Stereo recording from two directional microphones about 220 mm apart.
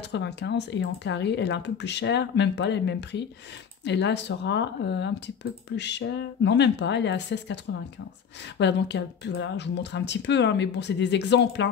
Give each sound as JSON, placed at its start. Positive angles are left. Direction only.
{"t": 0.1, "sound": "speech", "side_deg": 50}
{"t": 8.5, "sound": "speech", "side_deg": 50}